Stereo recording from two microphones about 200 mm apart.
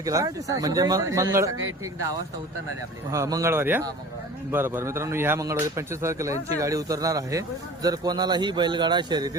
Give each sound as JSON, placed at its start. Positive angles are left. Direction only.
{"t": 0.0, "sound": "speech", "side_deg": -15}
{"t": 3.1, "sound": "speech", "side_deg": -15}